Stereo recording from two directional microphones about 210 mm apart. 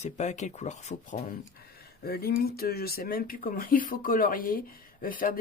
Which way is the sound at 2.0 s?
45° left (ahead or behind).